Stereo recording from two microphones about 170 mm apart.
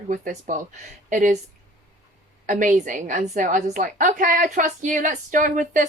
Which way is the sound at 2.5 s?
50° right (ahead or behind).